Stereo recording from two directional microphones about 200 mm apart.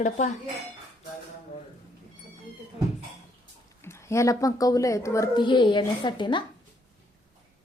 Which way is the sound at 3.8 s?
15° left (ahead or behind).